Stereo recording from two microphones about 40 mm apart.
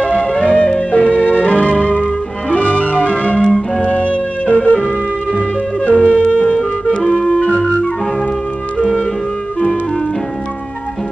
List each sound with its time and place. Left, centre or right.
0.0 s music: left
5.9 s music: left
7.0 s music: centre